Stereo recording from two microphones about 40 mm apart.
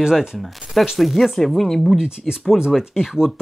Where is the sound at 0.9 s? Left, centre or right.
Centre.